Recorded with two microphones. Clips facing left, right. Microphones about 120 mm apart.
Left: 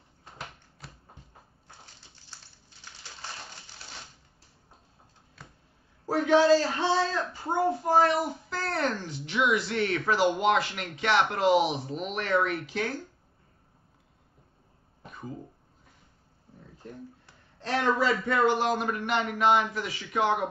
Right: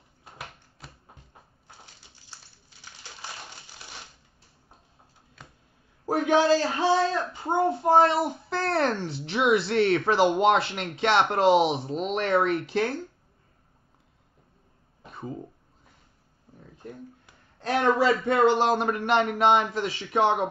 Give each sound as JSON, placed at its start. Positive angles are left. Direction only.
{"t": 0.2, "sound": "a sound", "side_deg": 0}
{"t": 6.0, "sound": "a man's voice", "side_deg": -20}
{"t": 15.0, "sound": "a sound", "side_deg": -30}
{"t": 17.6, "sound": "a man's voice", "side_deg": -20}
{"t": 18.9, "sound": "speech", "side_deg": -45}
{"t": 19.3, "sound": "a man's voice", "side_deg": -30}